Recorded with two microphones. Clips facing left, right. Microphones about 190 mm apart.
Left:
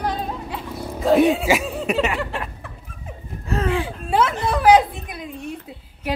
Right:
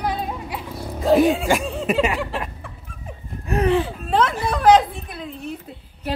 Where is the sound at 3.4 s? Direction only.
15° right (ahead or behind).